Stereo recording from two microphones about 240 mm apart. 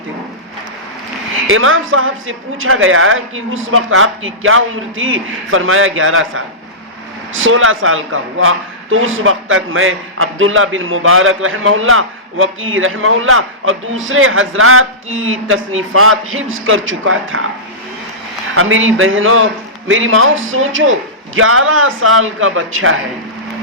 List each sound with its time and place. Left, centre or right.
1.5 s a man's voice: right
18.5 s a man's voice: right